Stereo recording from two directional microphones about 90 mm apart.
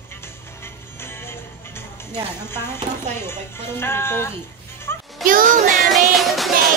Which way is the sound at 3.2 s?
25° left (ahead or behind).